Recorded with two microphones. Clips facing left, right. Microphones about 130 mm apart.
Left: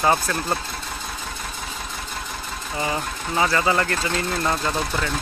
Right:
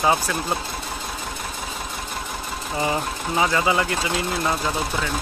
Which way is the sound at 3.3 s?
15° right (ahead or behind).